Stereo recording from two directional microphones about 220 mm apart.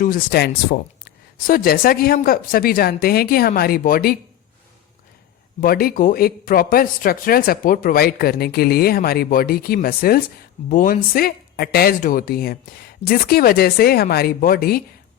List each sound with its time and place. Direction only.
0.0 s speech: 40° left (ahead or behind)
5.5 s speech: 40° left (ahead or behind)